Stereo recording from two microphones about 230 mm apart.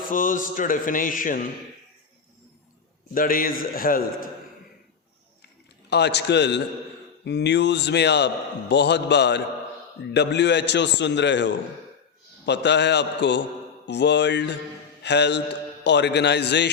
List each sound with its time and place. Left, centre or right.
0.1 s mantra: left
3.2 s mantra: left
5.9 s a man's voice: left